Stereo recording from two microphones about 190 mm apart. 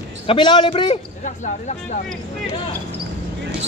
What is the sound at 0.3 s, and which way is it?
Speech, 25° left (ahead or behind).